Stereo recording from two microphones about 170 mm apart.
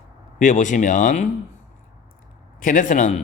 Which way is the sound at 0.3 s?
50° left (ahead or behind).